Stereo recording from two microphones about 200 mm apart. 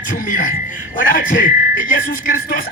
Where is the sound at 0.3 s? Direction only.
40° left (ahead or behind).